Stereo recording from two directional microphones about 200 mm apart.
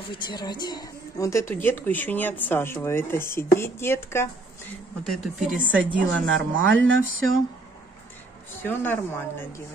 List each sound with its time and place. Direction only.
0.1 s a woman's voice: 20° left (ahead or behind)
5.0 s speech: centre (ahead or behind)
6.2 s a sound: 70° right (ahead or behind)
8.6 s a woman's voice: 10° left (ahead or behind)